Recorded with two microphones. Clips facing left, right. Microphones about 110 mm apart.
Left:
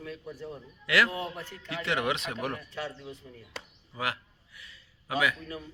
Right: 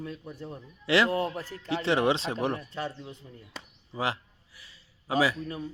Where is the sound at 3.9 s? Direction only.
30° right (ahead or behind).